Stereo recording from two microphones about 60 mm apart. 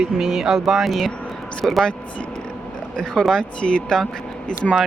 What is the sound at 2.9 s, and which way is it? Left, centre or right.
Speech, centre.